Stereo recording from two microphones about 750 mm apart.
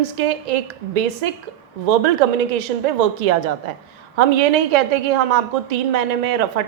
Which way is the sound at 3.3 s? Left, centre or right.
Right.